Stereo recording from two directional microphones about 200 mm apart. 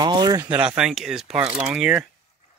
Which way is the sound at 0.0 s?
20° right (ahead or behind).